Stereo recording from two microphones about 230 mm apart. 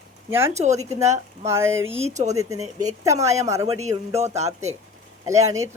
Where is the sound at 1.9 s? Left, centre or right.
Right.